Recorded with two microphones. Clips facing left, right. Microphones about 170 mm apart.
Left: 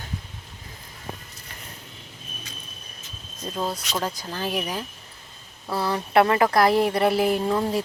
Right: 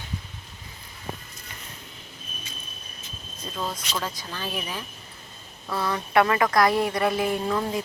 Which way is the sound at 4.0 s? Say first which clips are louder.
Left 6 dB; 40° left (ahead or behind).